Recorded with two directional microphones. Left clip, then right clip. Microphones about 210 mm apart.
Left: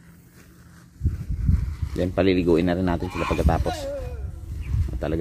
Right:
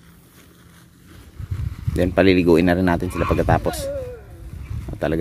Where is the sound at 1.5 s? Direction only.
30° right (ahead or behind).